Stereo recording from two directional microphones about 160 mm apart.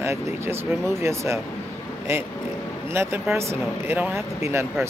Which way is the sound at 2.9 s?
15° right (ahead or behind).